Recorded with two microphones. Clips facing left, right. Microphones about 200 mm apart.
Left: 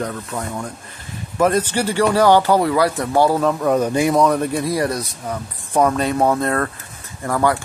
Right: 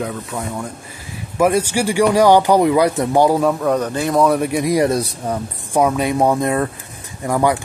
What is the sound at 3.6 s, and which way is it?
Speech, 5° left (ahead or behind).